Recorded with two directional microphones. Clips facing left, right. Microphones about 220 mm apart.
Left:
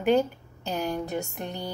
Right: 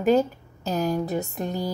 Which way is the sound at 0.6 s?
40° right (ahead or behind).